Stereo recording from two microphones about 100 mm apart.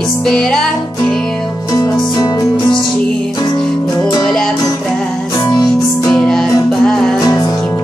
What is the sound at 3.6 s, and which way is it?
Music, 5° left (ahead or behind).